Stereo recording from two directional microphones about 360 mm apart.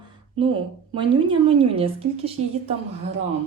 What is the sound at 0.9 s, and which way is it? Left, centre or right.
Speech, centre.